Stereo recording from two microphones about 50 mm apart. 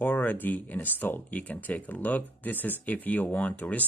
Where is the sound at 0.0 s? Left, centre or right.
Left.